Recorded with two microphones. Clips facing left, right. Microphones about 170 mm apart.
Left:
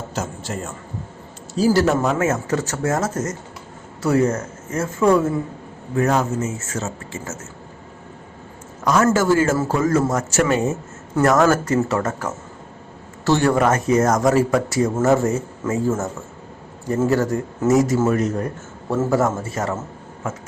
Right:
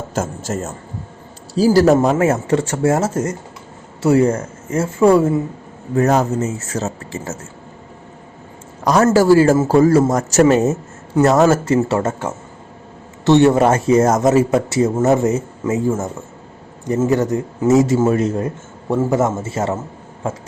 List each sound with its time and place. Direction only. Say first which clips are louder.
0.1 s a man's voice: right 7 dB; 45° right (ahead or behind)
8.8 s a man's voice: right 4 dB; 35° right (ahead or behind)
11.1 s speech: right 3 dB; 25° right (ahead or behind)
17.1 s a man's voice: right 2 dB; 20° right (ahead or behind)